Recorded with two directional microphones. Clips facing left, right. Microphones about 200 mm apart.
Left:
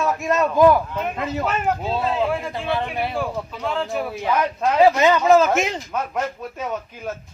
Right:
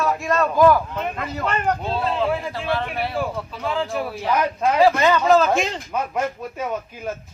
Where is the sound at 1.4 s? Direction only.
5° left (ahead or behind).